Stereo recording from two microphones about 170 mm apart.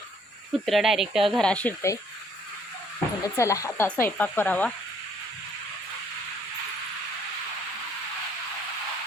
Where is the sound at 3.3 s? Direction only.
20° left (ahead or behind).